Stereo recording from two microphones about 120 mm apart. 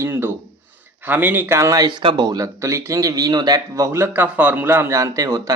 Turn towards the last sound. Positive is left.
turn(degrees=-25)  # may be behind; listen again after turning